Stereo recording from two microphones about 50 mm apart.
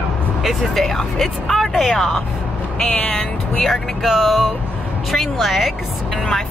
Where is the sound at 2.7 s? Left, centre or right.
Centre.